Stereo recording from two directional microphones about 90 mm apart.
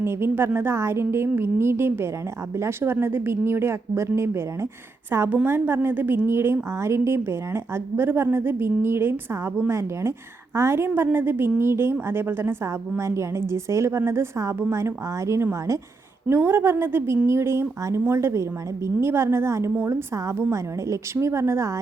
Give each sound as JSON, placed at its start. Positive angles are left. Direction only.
{"t": 0.0, "sound": "a woman's voice", "side_deg": -25}